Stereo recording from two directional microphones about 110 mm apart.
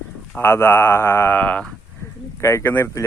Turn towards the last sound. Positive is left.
turn(degrees=25)  # may be behind; listen again after turning